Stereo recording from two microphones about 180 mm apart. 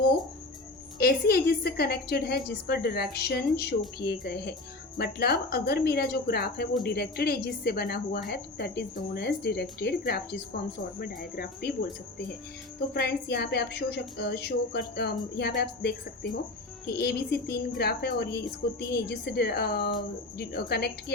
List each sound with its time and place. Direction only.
0.9 s speech: 60° left (ahead or behind)
12.9 s speech: 65° left (ahead or behind)
16.8 s speech: 65° left (ahead or behind)